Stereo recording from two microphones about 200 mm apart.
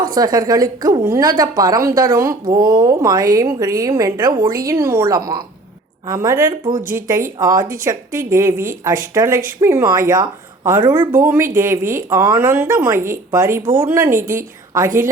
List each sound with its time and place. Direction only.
0.1 s speech: 20° right (ahead or behind)